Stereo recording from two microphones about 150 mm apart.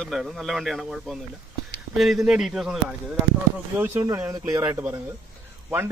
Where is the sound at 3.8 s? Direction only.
15° right (ahead or behind).